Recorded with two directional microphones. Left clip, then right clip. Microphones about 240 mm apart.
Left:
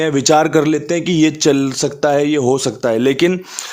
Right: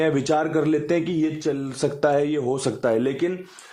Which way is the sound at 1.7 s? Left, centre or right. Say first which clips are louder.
Left 6 dB; centre.